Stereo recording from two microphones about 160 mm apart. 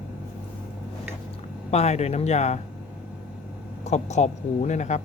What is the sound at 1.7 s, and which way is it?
Speech, 40° left (ahead or behind).